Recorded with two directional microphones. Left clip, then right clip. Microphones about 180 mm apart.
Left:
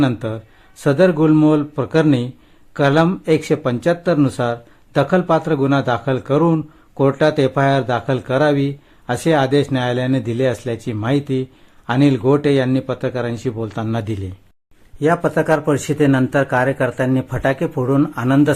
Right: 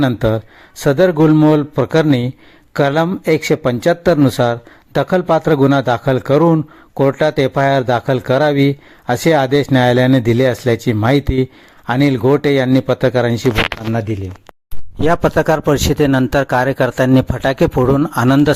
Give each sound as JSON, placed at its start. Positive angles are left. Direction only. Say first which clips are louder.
{"t": 0.2, "sound": "speech", "louder": "right 10 dB", "side_deg": -35}
{"t": 15.0, "sound": "a man's voice", "louder": "right 3 dB", "side_deg": -55}